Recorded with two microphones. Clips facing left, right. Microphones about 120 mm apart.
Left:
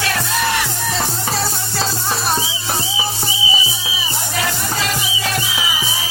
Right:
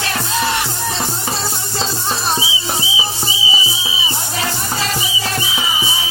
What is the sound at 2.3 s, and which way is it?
Music, 5° right (ahead or behind).